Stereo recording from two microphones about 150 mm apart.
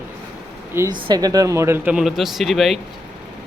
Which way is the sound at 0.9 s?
30° right (ahead or behind).